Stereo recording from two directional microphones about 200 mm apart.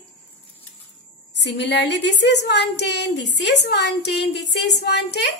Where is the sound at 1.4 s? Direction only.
60° left (ahead or behind).